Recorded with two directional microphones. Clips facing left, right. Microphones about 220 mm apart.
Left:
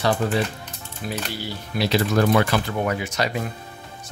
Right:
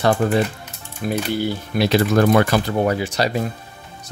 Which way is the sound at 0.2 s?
55° right (ahead or behind).